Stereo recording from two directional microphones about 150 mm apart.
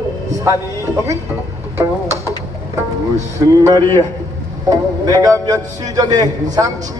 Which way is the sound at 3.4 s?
25° right (ahead or behind).